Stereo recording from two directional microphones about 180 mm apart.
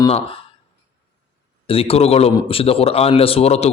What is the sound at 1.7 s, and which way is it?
Speech, 30° left (ahead or behind).